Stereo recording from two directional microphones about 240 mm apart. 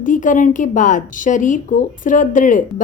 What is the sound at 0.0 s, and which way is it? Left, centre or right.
Speech, left.